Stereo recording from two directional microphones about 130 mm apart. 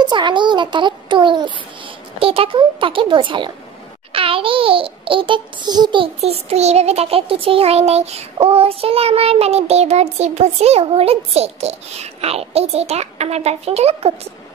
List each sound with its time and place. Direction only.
0.0 s a child's voice: 35° right (ahead or behind)
6.2 s child singing: 55° right (ahead or behind)